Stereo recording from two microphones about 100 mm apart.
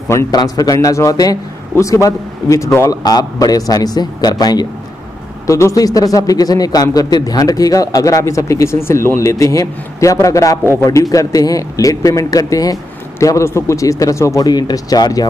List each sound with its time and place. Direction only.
0.3 s speech: 40° left (ahead or behind)
3.0 s speech: 40° left (ahead or behind)